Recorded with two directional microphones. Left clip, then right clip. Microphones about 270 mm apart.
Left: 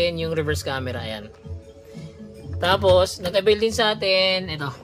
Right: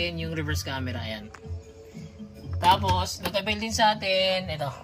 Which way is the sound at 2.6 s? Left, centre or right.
Centre.